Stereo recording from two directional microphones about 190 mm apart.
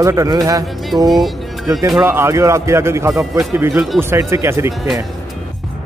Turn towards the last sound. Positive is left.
turn(degrees=-15)  # may be behind; listen again after turning